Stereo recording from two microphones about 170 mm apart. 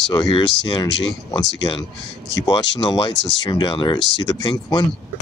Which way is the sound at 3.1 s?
90° left.